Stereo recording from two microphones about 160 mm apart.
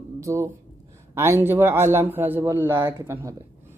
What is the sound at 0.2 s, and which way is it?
Speech, 20° right (ahead or behind).